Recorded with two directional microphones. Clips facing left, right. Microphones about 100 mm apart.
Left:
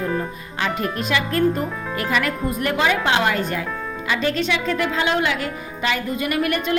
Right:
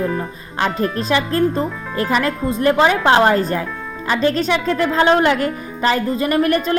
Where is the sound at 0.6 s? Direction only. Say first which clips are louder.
Right 4 dB; 35° right (ahead or behind).